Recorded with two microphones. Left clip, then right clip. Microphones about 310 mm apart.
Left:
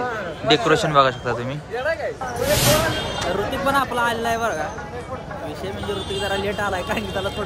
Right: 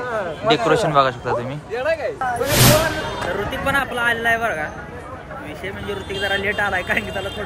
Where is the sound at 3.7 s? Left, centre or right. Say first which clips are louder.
Right 1 dB; centre.